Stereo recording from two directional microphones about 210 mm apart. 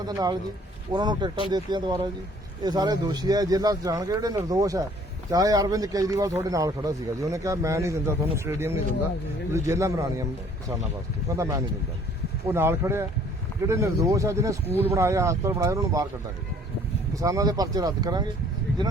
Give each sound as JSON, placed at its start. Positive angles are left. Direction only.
{"t": 0.1, "sound": "speech", "side_deg": -20}
{"t": 11.3, "sound": "speech", "side_deg": -15}
{"t": 17.2, "sound": "speech", "side_deg": -15}